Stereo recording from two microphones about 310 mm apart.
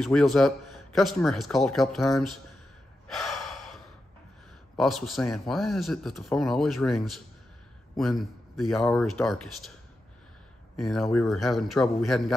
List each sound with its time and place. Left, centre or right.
0.0 s a man's voice: centre
3.1 s gasp: centre
4.7 s a man's voice: centre
10.8 s a man's voice: centre